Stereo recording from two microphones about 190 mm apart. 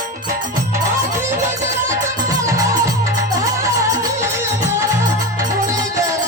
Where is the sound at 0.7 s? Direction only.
15° right (ahead or behind).